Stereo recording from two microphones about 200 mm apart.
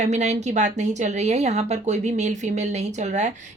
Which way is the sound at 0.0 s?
35° right (ahead or behind).